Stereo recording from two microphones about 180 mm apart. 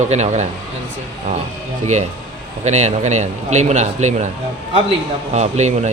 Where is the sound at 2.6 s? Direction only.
40° right (ahead or behind).